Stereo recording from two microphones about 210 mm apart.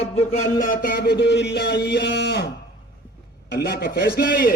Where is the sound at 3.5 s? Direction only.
50° left (ahead or behind).